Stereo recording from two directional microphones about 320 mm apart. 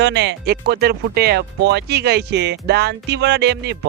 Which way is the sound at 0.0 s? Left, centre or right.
Right.